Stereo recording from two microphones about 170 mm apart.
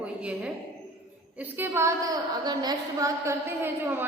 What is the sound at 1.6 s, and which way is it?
A woman's voice, 15° right (ahead or behind).